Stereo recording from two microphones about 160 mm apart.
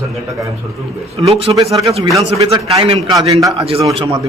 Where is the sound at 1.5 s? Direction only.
20° right (ahead or behind).